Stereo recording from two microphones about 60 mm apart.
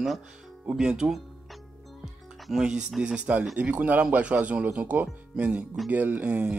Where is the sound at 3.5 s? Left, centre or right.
Right.